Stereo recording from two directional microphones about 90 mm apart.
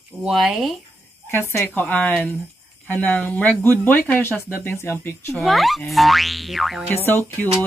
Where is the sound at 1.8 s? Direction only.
15° left (ahead or behind).